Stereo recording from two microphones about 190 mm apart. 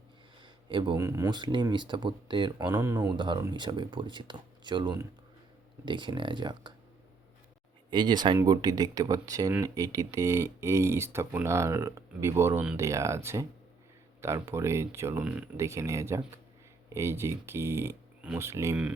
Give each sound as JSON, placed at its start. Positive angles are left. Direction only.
{"t": 0.4, "sound": "speech", "side_deg": -25}
{"t": 7.9, "sound": "speech", "side_deg": -20}